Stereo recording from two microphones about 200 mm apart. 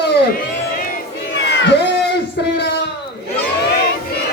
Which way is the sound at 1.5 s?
60° left (ahead or behind).